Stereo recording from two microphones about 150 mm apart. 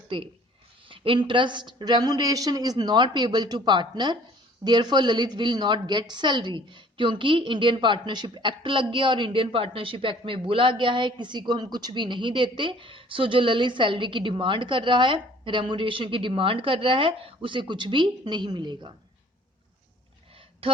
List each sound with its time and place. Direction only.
0.1 s a woman's voice: 35° right (ahead or behind)